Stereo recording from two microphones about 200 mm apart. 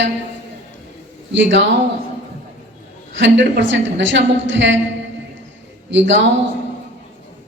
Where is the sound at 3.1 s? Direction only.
65° right (ahead or behind).